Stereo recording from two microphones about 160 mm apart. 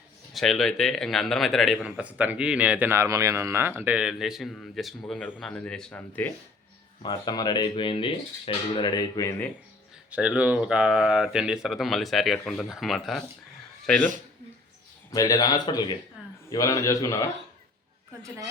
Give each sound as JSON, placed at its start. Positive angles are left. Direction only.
{"t": 0.3, "sound": "a man's voice", "side_deg": 0}
{"t": 7.0, "sound": "speech", "side_deg": 25}
{"t": 10.1, "sound": "a man's voice", "side_deg": -10}
{"t": 15.1, "sound": "speech", "side_deg": 20}